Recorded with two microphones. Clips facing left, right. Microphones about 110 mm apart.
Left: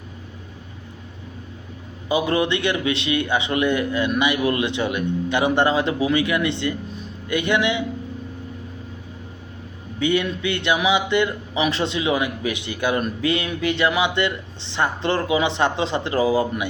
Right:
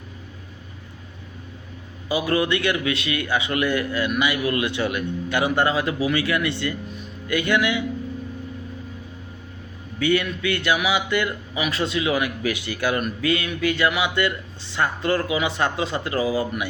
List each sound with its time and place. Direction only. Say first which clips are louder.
2.0 s speech: left 1 dB; 25° left (ahead or behind)
10.0 s speech: left 1 dB; 20° left (ahead or behind)